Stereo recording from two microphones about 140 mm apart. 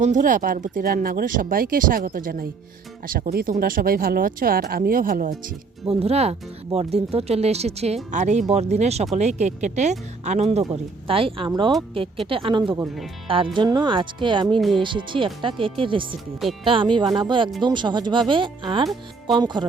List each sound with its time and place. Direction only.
0.0 s speech: 65° right (ahead or behind); by 5.3 s 80° right
5.8 s speech: 45° right (ahead or behind)
11.1 s speech: 40° right (ahead or behind)